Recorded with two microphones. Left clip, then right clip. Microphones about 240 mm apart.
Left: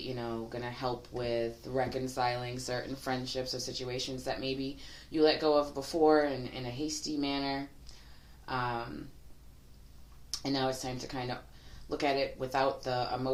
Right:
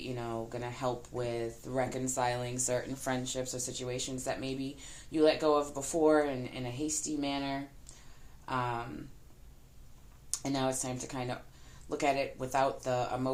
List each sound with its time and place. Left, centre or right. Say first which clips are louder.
0.2 s speech: even; right
10.3 s speech: left 1 dB; right